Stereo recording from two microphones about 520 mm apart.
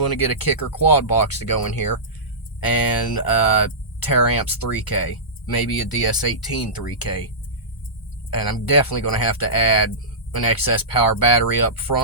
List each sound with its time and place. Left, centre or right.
0.0 s speech: left
8.3 s speech: left